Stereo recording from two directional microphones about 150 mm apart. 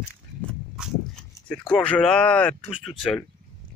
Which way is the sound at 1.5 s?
10° left (ahead or behind).